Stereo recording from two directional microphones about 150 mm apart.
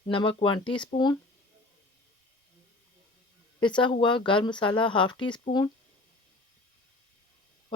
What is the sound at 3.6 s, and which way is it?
Speech, 30° left (ahead or behind).